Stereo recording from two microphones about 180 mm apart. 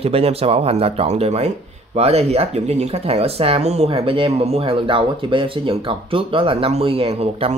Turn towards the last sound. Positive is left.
turn(degrees=-35)  # may be behind; listen again after turning